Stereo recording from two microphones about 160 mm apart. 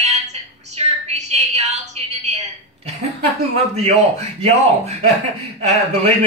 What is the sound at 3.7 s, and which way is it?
A man's voice, 45° right (ahead or behind).